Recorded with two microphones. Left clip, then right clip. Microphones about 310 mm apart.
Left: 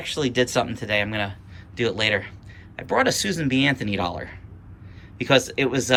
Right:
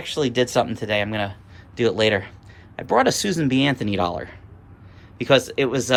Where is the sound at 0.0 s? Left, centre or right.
Centre.